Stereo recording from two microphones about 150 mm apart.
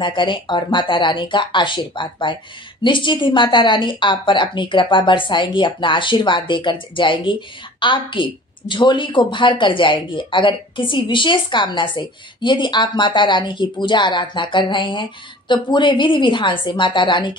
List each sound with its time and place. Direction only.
0.0 s a woman's voice: 35° left (ahead or behind)